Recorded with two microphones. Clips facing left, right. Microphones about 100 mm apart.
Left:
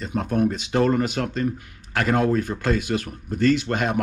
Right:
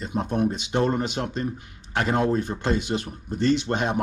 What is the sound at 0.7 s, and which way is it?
Speech, 25° right (ahead or behind).